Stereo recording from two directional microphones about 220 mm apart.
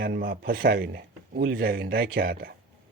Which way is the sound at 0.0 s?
40° right (ahead or behind).